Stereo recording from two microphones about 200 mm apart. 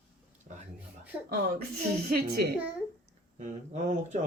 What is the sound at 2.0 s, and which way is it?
Speech, 50° right (ahead or behind).